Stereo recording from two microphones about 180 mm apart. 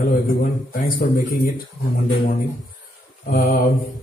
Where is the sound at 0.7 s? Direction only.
55° left (ahead or behind).